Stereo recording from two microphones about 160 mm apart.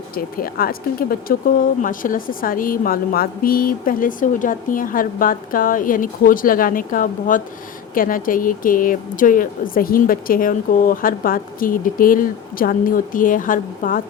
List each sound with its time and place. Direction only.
0.1 s speech: 65° left (ahead or behind)